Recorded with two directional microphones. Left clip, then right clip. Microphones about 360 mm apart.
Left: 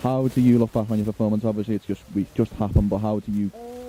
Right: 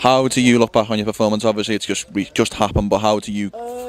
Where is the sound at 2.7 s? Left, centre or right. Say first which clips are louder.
Right 8 dB; right.